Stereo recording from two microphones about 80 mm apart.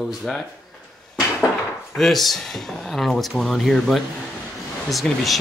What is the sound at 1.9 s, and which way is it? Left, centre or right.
Speech, centre.